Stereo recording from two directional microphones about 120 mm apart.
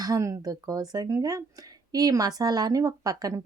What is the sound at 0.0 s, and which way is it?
A woman's voice, 25° right (ahead or behind).